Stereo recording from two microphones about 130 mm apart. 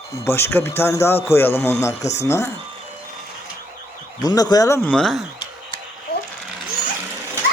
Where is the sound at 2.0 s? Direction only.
60° left (ahead or behind).